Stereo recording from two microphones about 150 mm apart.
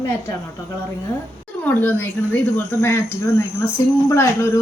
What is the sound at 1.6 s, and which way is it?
Speech, 10° left (ahead or behind).